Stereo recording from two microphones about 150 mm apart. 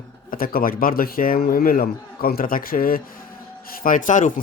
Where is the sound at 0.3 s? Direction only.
70° left (ahead or behind).